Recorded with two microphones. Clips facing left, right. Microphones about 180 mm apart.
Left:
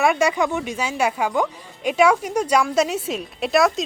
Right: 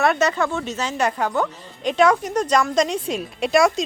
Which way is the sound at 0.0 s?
10° left (ahead or behind).